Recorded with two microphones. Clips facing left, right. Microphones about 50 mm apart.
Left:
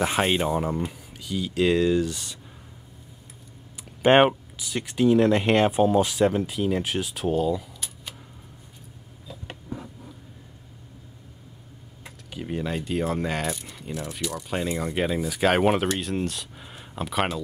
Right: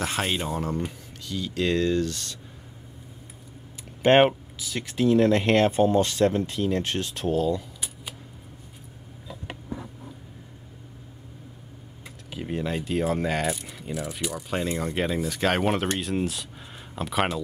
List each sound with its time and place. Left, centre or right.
0.0 s speech: centre
4.0 s speech: centre
12.4 s speech: centre